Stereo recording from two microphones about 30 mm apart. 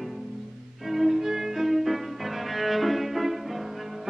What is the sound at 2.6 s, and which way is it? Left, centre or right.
Cello, centre.